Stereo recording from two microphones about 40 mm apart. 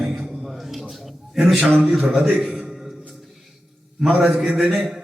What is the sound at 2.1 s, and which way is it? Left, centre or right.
Speech, right.